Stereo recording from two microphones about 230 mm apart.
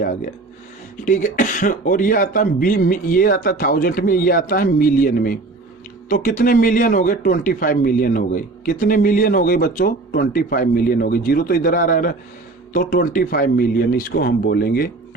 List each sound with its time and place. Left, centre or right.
1.0 s a man's voice: left